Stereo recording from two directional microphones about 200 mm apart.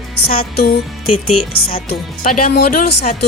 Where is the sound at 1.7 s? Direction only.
50° left (ahead or behind).